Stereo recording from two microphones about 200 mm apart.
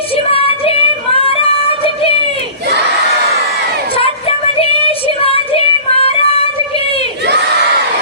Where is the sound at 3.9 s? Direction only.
30° left (ahead or behind).